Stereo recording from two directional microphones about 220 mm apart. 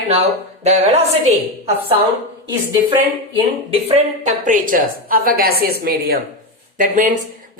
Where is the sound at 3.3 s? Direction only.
25° right (ahead or behind).